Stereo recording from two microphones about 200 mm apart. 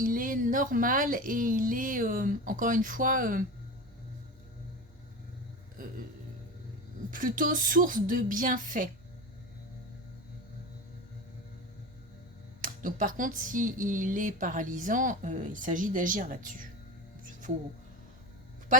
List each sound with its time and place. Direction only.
0.0 s speech: 45° right (ahead or behind)
7.1 s speech: 40° right (ahead or behind)
12.6 s speech: 40° right (ahead or behind)